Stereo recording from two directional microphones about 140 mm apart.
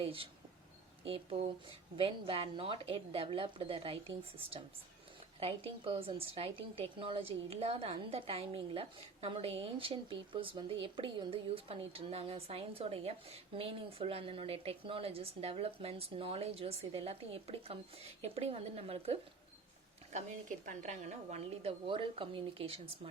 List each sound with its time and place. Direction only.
0.0 s a sound: 40° right (ahead or behind)
1.0 s a woman's voice: 40° right (ahead or behind)
20.1 s a woman's voice: 60° right (ahead or behind); by 22.8 s 40° right (ahead or behind)